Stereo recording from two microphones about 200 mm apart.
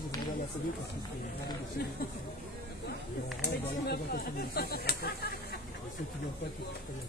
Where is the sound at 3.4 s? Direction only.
50° left (ahead or behind).